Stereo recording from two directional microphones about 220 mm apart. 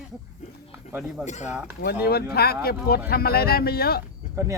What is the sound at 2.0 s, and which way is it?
Speech, 45° left (ahead or behind).